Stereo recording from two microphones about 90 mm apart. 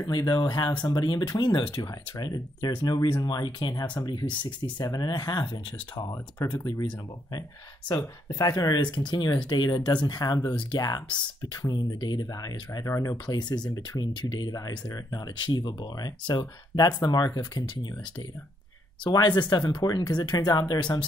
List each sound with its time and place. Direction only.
0.1 s speech: 35° left (ahead or behind)
0.4 s speech: 50° left (ahead or behind)
4.3 s speech: 60° left (ahead or behind)
4.8 s speech: 45° left (ahead or behind)
8.4 s speech: 45° left (ahead or behind)
8.9 s speech: 60° left (ahead or behind)
12.9 s speech: 30° left (ahead or behind)
13.3 s speech: 55° left (ahead or behind)
14.9 s speech: 40° left (ahead or behind)
15.4 s speech: 55° left (ahead or behind)
19.0 s speech: 50° left (ahead or behind)